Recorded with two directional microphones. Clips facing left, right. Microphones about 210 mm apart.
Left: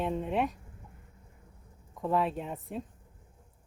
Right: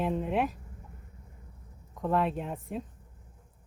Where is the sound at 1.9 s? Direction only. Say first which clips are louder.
Right 1 dB; centre (ahead or behind).